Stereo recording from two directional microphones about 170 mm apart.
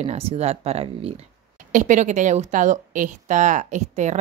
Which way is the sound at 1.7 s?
50° right (ahead or behind).